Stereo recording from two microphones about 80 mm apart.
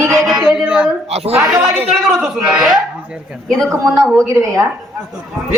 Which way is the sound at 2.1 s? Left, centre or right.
Centre.